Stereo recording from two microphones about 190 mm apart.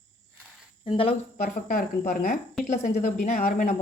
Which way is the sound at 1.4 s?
50° left (ahead or behind).